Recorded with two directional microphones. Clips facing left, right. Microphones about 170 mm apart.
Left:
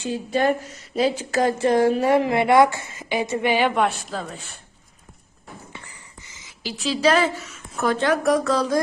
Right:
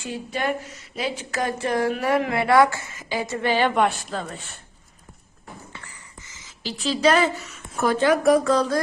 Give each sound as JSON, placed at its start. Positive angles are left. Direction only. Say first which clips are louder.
{"t": 0.0, "sound": "a woman's voice", "louder": "left 6 dB", "side_deg": 30}
{"t": 3.8, "sound": "a woman's voice", "louder": "even", "side_deg": 0}
{"t": 6.9, "sound": "a woman's voice", "louder": "even", "side_deg": 5}
{"t": 8.5, "sound": "mantra", "louder": "even", "side_deg": 10}